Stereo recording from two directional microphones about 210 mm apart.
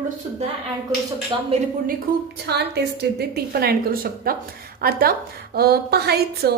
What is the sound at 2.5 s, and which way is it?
A woman's voice, 50° right (ahead or behind).